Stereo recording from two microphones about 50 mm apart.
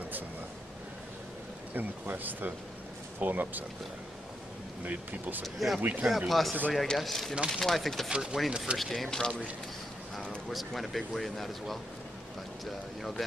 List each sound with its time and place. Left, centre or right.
1.8 s speech: right
4.8 s speech: right
5.4 s speech: centre
5.8 s speech: right
6.0 s speech: centre
8.1 s speech: centre
8.7 s speech: centre
10.5 s speech: centre